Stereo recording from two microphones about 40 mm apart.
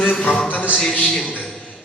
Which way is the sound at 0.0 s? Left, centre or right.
Left.